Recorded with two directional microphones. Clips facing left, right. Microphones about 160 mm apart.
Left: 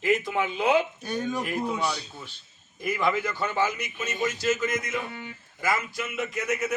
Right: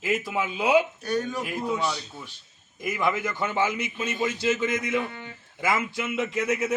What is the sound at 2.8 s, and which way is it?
A man's voice, 20° right (ahead or behind).